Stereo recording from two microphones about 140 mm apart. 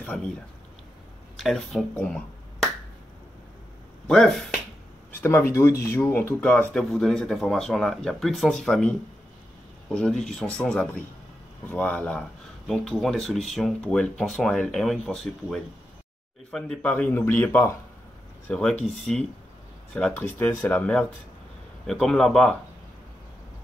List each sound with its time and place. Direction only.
0.0 s speech: 5° left (ahead or behind)
1.3 s speech: centre (ahead or behind)
4.1 s speech: 5° left (ahead or behind)
5.2 s speech: 20° left (ahead or behind); by 16.9 s 5° left (ahead or behind)
16.9 s speech: 15° left (ahead or behind)
19.9 s speech: 10° left (ahead or behind)